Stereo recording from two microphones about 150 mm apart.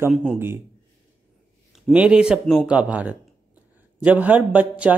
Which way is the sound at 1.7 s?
10° right (ahead or behind).